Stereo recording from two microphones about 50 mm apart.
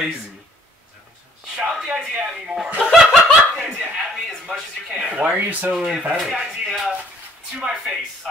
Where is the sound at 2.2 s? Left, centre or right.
Centre.